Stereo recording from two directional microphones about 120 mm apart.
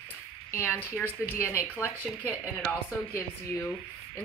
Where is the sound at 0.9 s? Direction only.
15° left (ahead or behind).